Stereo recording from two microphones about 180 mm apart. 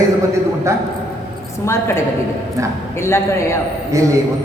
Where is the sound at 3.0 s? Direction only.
15° left (ahead or behind).